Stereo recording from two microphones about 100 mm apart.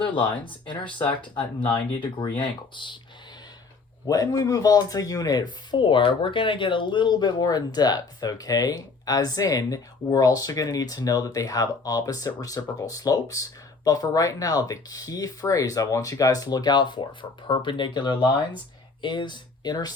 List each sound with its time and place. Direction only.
0.2 s speech: 55° left (ahead or behind)
4.0 s speech: 40° left (ahead or behind)